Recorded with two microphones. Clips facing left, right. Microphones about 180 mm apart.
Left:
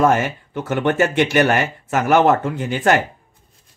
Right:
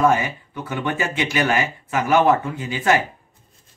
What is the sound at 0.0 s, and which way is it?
Speech, 65° left (ahead or behind).